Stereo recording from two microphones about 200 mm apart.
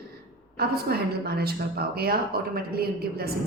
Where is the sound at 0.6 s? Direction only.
55° right (ahead or behind).